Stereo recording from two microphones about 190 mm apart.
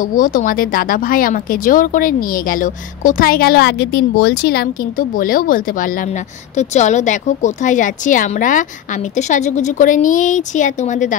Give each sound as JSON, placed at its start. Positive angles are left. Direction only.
{"t": 0.0, "sound": "a woman's voice", "side_deg": 45}